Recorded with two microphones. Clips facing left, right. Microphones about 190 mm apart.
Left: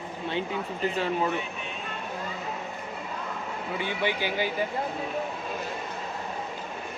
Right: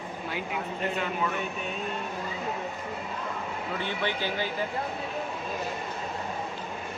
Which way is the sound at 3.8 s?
15° left (ahead or behind).